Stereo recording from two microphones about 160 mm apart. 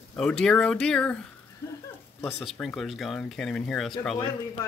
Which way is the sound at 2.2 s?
15° left (ahead or behind).